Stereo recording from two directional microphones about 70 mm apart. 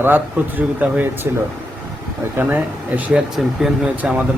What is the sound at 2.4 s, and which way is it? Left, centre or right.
Speech, right.